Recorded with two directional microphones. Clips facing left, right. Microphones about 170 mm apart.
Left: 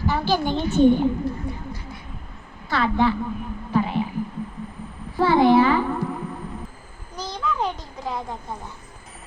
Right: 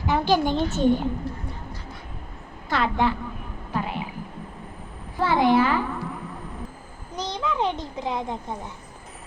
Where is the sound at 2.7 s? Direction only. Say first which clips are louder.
Left 2 dB; 15° right (ahead or behind).